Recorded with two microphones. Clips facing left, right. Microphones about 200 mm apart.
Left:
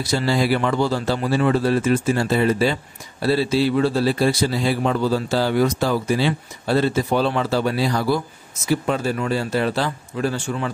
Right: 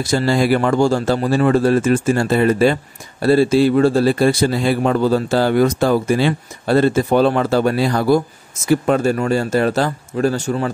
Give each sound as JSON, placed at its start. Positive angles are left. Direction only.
{"t": 0.0, "sound": "speech", "side_deg": -45}